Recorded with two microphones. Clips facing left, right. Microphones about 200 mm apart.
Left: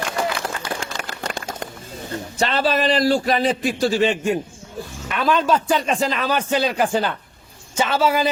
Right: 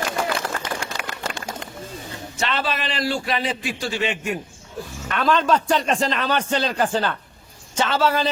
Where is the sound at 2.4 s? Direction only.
40° left (ahead or behind).